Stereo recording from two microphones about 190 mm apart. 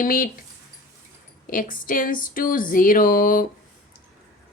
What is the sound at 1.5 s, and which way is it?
Speech, 45° left (ahead or behind).